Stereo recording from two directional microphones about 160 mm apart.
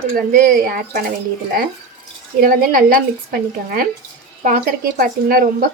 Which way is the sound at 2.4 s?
60° right (ahead or behind).